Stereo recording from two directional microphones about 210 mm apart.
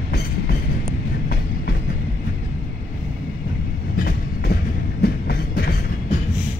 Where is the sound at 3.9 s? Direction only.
45° left (ahead or behind).